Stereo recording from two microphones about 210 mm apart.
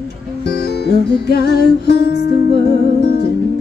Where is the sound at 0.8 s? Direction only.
50° left (ahead or behind).